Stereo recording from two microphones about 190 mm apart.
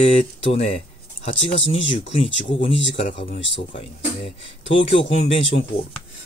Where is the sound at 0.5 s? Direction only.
35° left (ahead or behind).